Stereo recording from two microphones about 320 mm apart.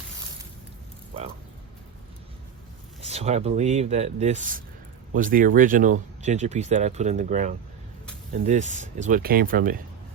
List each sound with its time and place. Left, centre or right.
3.0 s speech: centre